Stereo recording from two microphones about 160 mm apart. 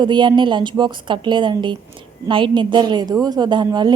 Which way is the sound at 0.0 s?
30° right (ahead or behind).